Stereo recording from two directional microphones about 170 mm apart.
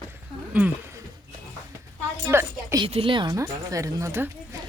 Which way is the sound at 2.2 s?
15° right (ahead or behind).